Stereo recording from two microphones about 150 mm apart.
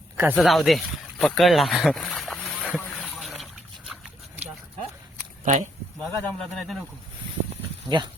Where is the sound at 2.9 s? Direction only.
5° left (ahead or behind).